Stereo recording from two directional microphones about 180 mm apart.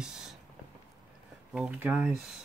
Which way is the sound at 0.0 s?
Centre (ahead or behind).